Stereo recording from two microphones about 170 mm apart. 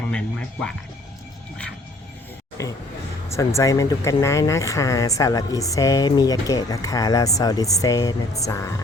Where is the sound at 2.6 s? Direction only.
20° left (ahead or behind).